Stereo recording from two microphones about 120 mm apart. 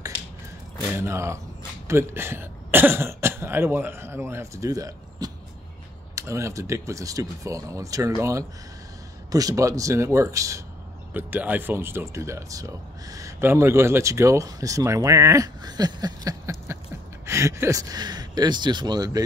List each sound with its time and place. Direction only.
0.9 s speech: 20° right (ahead or behind)
11.1 s speech: 15° right (ahead or behind); by 19.2 s 35° right (ahead or behind)